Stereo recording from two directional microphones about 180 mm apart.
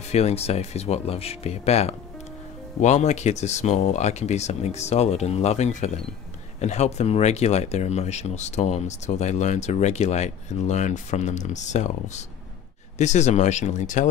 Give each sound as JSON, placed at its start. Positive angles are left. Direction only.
{"t": 0.1, "sound": "speech", "side_deg": 35}